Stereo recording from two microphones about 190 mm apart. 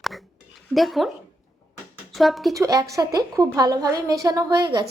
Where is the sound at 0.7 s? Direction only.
Centre (ahead or behind).